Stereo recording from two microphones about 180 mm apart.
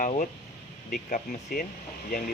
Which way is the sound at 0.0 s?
45° left (ahead or behind).